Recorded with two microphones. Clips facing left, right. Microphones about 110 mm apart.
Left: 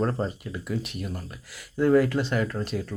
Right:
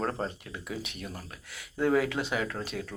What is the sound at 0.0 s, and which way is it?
Speech, centre (ahead or behind).